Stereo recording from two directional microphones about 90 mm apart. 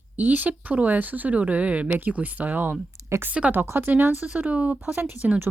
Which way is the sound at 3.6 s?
25° right (ahead or behind).